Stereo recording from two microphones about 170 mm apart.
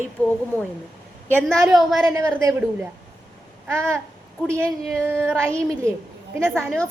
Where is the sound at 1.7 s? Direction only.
Centre (ahead or behind).